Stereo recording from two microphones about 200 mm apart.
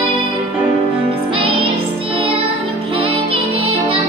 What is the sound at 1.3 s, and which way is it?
Music, 25° right (ahead or behind).